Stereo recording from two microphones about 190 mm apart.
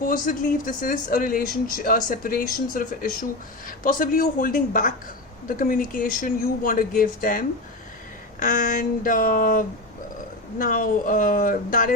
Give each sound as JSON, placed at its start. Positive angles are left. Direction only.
{"t": 0.0, "sound": "speech", "side_deg": 45}